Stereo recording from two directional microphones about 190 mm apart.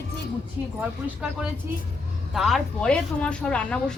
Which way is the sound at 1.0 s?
5° right (ahead or behind).